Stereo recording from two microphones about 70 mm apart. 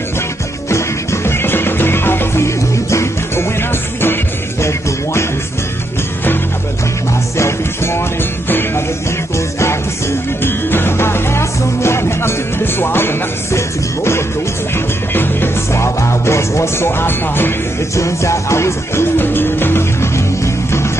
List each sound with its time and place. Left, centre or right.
0.7 s music: left
7.3 s music: left
17.9 s music: left